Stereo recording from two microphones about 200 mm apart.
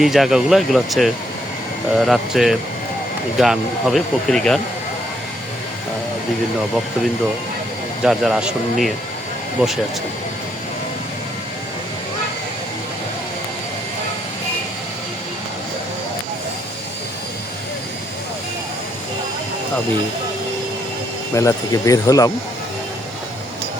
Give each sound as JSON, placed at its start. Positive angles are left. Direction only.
{"t": 0.0, "sound": "speech", "side_deg": 0}
{"t": 8.0, "sound": "speech", "side_deg": 0}
{"t": 21.3, "sound": "speech", "side_deg": 15}